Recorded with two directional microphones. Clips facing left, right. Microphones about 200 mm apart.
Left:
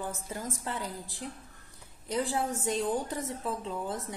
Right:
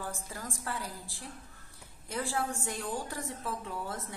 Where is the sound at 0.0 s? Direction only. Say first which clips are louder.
Left 4 dB; 20° left (ahead or behind).